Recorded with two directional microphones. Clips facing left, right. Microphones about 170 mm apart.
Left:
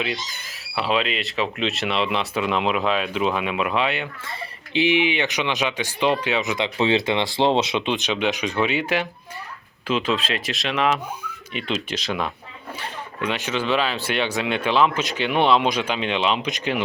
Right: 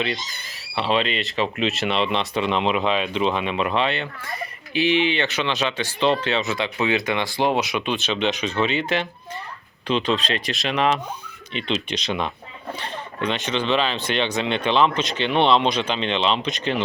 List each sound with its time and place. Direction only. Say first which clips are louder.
0.8 s speech: right 1 dB; 5° left (ahead or behind)